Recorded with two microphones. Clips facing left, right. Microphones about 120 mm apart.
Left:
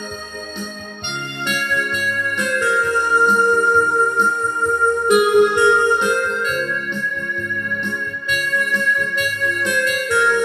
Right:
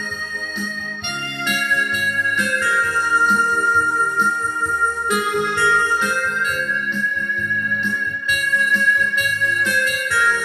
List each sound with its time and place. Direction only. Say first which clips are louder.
2.6 s music: left 5 dB; 15° left (ahead or behind)
10.0 s music: left 5 dB; 15° left (ahead or behind)